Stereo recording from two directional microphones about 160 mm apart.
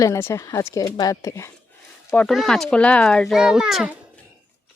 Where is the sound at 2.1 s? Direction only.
Centre (ahead or behind).